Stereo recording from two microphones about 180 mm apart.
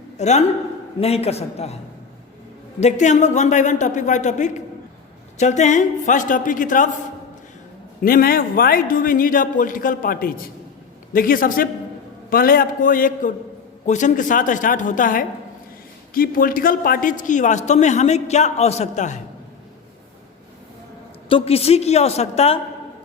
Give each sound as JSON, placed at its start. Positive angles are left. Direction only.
{"t": 0.2, "sound": "speech", "side_deg": 40}
{"t": 2.8, "sound": "a man's voice", "side_deg": 40}
{"t": 8.0, "sound": "a man's voice", "side_deg": 55}
{"t": 21.2, "sound": "speech", "side_deg": 30}